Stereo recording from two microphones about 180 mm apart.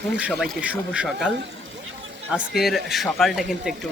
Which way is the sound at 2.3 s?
5° right (ahead or behind).